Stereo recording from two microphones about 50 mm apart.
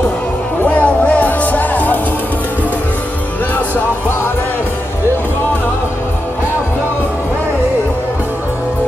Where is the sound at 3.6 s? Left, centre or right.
Left.